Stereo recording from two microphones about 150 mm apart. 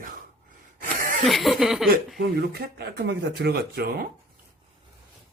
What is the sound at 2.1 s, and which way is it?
Speech, 90° right.